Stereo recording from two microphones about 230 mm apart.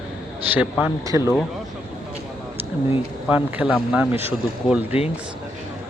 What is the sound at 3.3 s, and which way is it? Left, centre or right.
Speech, centre.